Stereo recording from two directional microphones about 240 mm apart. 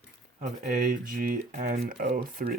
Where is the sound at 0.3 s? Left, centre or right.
Right.